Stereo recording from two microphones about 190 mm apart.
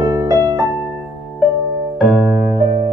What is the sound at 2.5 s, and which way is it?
Music, 30° right (ahead or behind).